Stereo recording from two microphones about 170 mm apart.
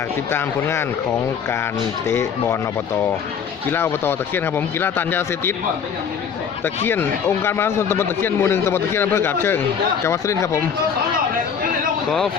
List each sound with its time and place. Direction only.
0.3 s a man's voice: 15° left (ahead or behind)
2.0 s a man's voice: 15° left (ahead or behind)
3.7 s a man's voice: 15° left (ahead or behind)
6.8 s a man's voice: 15° left (ahead or behind)